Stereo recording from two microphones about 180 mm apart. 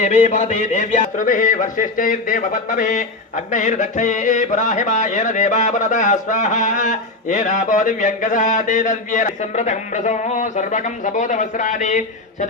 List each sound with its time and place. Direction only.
0.0 s speech: 35° left (ahead or behind)